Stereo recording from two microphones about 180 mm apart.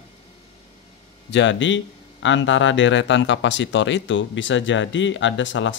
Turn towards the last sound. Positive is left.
turn(degrees=90)